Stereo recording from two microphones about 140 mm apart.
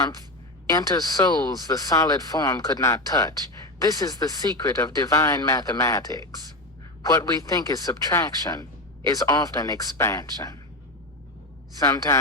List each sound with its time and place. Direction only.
0.7 s speech: 25° left (ahead or behind)
11.8 s speech: 25° left (ahead or behind)